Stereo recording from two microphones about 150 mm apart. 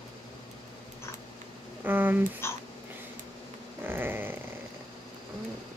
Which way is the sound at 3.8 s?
15° right (ahead or behind).